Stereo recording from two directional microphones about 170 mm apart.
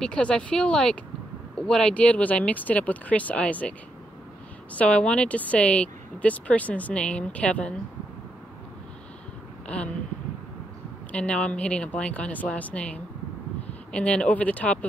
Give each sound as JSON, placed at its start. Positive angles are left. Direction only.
{"t": 0.0, "sound": "speech", "side_deg": 5}
{"t": 4.7, "sound": "speech", "side_deg": 5}
{"t": 9.7, "sound": "speech", "side_deg": 5}
{"t": 11.1, "sound": "speech", "side_deg": 5}